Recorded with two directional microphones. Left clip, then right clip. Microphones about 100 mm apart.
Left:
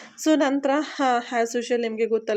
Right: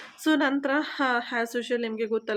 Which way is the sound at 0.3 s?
25° left (ahead or behind).